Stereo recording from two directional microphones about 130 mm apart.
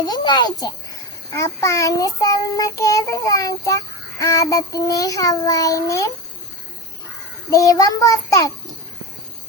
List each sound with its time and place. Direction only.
0.0 s a child's voice: 30° left (ahead or behind)
1.4 s child singing: 25° left (ahead or behind)
7.5 s child singing: 25° left (ahead or behind)